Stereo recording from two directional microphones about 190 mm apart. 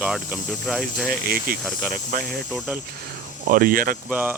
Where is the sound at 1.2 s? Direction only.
50° right (ahead or behind).